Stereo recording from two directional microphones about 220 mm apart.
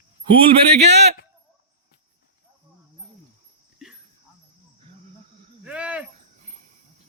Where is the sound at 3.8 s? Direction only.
Centre (ahead or behind).